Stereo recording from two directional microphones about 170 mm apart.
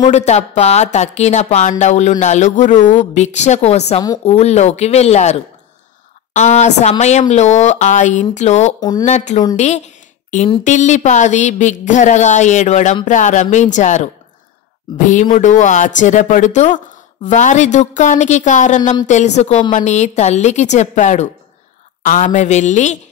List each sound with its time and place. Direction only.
0.1 s speech: 40° left (ahead or behind)
9.6 s a sound: 45° left (ahead or behind)
10.6 s speech: 45° left (ahead or behind)
15.0 s speech: 45° left (ahead or behind)